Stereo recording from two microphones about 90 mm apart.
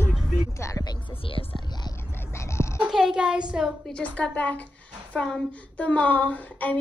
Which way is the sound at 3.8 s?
15° left (ahead or behind).